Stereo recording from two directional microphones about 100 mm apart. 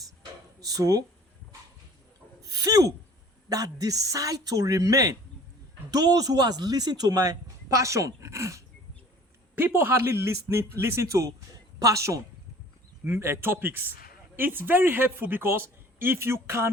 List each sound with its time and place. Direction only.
0.6 s speech: 35° right (ahead or behind)
2.5 s a sound: 40° right (ahead or behind)
3.5 s speech: 35° right (ahead or behind)
9.6 s speech: 20° right (ahead or behind)